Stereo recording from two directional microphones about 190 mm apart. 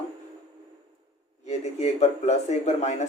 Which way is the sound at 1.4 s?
35° left (ahead or behind).